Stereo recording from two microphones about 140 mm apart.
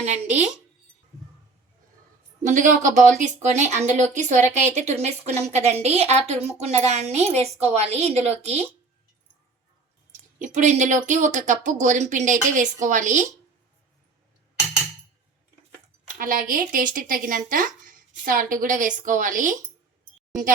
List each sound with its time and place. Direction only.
0.0 s speech: 55° right (ahead or behind)
2.4 s speech: 65° right (ahead or behind)
10.3 s speech: 65° right (ahead or behind)
16.1 s speech: 80° right